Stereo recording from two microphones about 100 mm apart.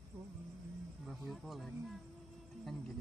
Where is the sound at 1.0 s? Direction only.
Centre (ahead or behind).